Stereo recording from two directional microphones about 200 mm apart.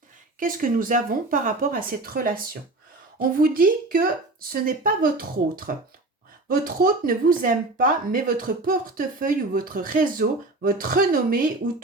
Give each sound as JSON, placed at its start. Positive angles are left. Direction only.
{"t": 0.3, "sound": "speech", "side_deg": -45}